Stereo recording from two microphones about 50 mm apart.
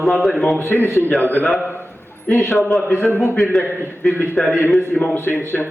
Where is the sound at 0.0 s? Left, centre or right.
Centre.